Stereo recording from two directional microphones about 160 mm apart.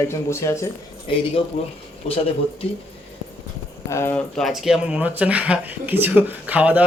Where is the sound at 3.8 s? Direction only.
15° left (ahead or behind).